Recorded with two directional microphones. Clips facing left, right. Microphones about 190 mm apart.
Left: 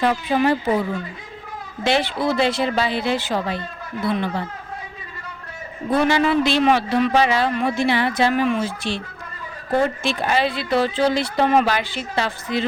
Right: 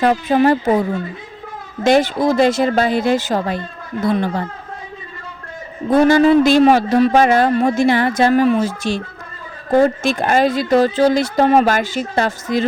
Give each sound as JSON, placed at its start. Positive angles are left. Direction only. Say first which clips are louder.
{"t": 0.0, "sound": "speech", "louder": "right 5 dB", "side_deg": -45}
{"t": 5.9, "sound": "speech", "louder": "right 7 dB", "side_deg": -45}